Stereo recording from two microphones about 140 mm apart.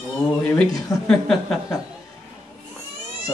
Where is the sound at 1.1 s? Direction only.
Centre (ahead or behind).